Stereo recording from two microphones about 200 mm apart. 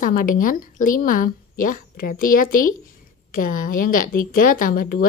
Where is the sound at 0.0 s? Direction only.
45° left (ahead or behind).